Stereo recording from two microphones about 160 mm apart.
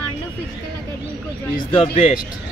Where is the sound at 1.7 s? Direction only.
40° left (ahead or behind).